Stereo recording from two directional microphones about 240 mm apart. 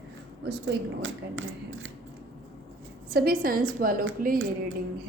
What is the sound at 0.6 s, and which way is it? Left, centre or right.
A woman's voice, right.